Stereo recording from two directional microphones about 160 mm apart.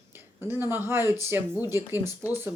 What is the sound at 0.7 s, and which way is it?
Speech, 15° right (ahead or behind).